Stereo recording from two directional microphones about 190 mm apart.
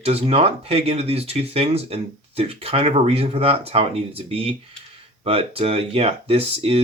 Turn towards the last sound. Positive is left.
turn(degrees=-30)  # may be behind; listen again after turning